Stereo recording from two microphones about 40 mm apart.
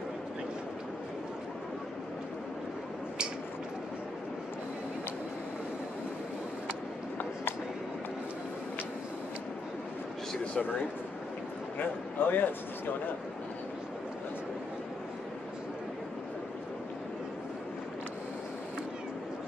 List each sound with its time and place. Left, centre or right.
11.8 s a man's voice: left